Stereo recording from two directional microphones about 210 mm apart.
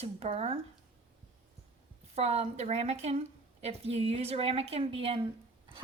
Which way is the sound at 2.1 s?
30° right (ahead or behind).